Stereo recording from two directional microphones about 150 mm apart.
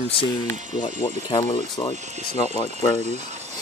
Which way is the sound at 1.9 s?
50° right (ahead or behind).